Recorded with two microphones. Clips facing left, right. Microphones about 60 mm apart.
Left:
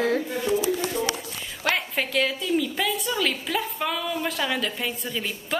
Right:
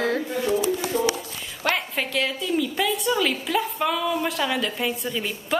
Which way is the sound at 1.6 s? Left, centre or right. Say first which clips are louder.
Right 1 dB; centre.